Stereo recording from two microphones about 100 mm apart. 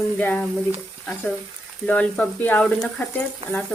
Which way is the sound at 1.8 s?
10° left (ahead or behind).